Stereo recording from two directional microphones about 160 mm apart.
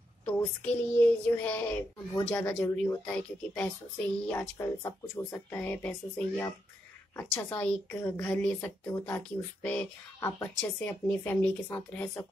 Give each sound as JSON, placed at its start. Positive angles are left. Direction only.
{"t": 0.2, "sound": "a woman's voice", "side_deg": 10}